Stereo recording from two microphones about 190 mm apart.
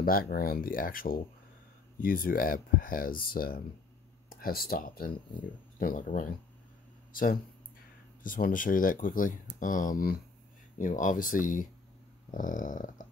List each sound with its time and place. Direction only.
0.0 s speech: 50° left (ahead or behind)
7.1 s a sound: 45° left (ahead or behind)
8.2 s speech: 45° left (ahead or behind)